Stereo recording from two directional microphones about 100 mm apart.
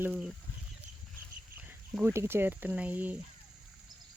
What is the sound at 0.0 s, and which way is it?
Speech, 10° right (ahead or behind).